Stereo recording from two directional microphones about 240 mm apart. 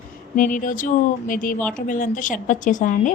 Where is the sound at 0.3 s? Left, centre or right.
Left.